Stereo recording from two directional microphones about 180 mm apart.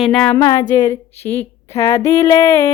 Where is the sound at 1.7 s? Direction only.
15° left (ahead or behind).